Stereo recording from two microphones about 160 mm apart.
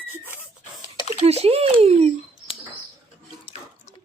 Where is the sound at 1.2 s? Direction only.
40° right (ahead or behind).